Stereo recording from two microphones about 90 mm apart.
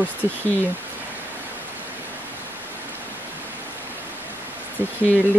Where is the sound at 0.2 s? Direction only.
30° right (ahead or behind).